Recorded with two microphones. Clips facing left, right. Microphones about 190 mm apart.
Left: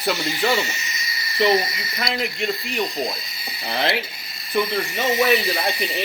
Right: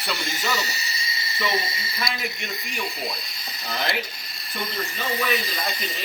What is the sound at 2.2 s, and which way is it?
Speech, 55° left (ahead or behind).